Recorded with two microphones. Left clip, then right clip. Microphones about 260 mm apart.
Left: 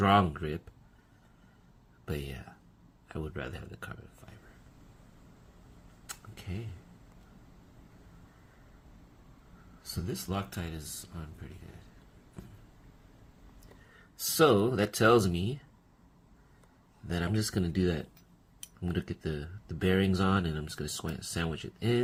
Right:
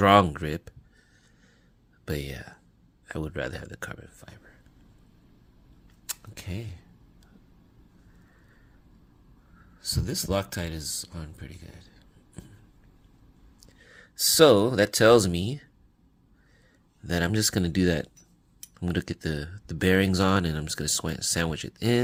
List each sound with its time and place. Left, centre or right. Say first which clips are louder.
0.0 s speech: right 7 dB; right
2.0 s speech: right 6 dB; right
9.8 s speech: right 8 dB; right
14.3 s speech: right 7 dB; right
17.1 s speech: right 8 dB; right